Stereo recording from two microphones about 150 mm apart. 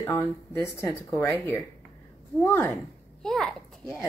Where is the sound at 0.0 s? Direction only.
15° left (ahead or behind).